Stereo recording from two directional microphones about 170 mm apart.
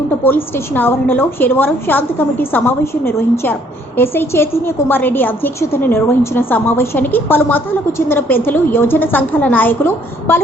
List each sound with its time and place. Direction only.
0.3 s a woman's voice: 10° left (ahead or behind)